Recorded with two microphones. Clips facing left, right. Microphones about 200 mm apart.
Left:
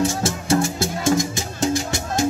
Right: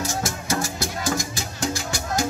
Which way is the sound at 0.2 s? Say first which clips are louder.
Left 7 dB; 25° left (ahead or behind).